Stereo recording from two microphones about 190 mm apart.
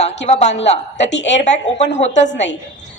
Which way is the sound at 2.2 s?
70° left (ahead or behind).